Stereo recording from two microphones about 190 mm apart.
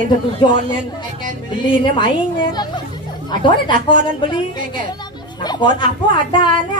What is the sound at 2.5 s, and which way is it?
A child's voice, 20° left (ahead or behind).